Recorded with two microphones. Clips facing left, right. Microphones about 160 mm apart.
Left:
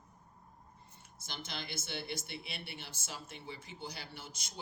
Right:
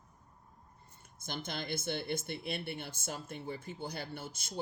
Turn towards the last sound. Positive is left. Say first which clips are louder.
# right 7 dB
turn(degrees=-50)  # may be behind; listen again after turning